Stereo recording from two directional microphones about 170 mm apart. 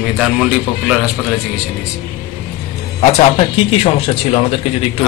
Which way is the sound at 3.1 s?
40° left (ahead or behind).